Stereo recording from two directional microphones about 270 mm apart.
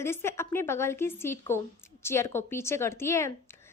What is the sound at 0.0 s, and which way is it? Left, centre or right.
A woman's voice, centre.